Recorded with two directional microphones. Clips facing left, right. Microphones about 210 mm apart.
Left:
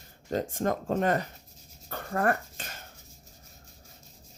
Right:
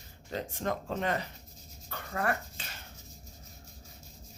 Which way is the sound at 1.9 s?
45° left (ahead or behind).